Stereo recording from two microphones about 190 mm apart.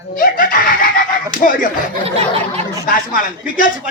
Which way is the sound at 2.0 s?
35° right (ahead or behind).